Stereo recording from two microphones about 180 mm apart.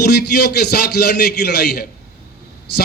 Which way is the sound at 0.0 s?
60° left (ahead or behind).